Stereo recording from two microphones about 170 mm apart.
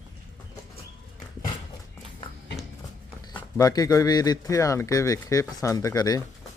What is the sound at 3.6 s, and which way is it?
Speech, 20° left (ahead or behind).